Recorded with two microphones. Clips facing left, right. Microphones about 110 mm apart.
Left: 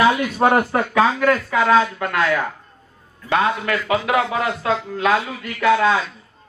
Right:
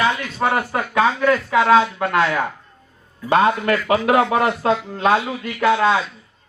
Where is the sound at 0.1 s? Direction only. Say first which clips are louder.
Left 4 dB; 15° left (ahead or behind).